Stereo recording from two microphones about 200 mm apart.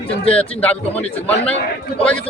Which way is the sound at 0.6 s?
10° left (ahead or behind).